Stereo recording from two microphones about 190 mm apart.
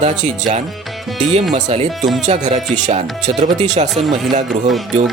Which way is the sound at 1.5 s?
35° right (ahead or behind).